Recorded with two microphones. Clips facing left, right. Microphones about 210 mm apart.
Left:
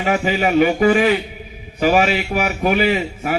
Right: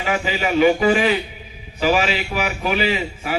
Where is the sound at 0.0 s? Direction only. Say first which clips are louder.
Left 4 dB; 50° left (ahead or behind).